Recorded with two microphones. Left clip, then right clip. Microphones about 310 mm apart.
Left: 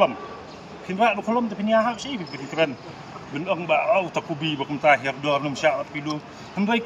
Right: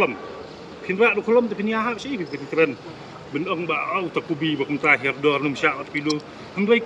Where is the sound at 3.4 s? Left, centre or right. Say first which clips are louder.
Left 4 dB; centre.